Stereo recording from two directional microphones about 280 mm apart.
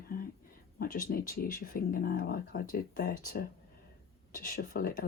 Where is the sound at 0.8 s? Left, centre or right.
Left.